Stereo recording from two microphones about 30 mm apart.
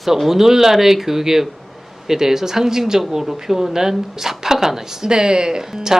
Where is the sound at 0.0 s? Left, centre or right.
Centre.